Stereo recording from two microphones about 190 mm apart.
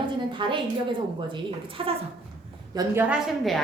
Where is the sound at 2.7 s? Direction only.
10° right (ahead or behind).